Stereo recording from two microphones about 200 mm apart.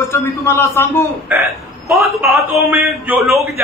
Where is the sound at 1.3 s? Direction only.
10° right (ahead or behind).